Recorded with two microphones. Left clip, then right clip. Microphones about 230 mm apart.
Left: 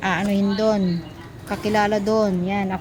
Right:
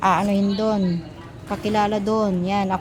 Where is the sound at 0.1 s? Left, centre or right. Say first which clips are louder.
Right 2 dB; centre.